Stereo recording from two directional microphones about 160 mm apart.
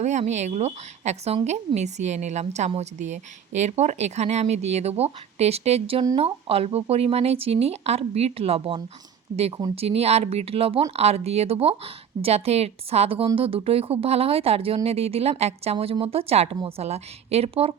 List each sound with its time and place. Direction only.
0.0 s a woman's voice: 45° right (ahead or behind)